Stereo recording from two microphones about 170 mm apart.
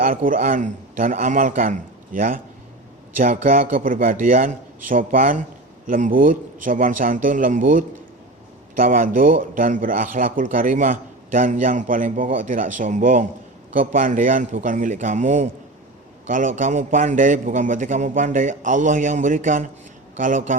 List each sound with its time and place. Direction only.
0.0 s speech: 55° right (ahead or behind)